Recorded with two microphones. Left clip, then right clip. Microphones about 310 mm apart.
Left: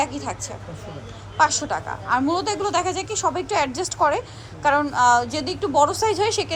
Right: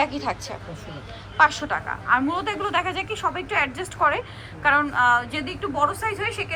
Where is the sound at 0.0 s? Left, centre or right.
Centre.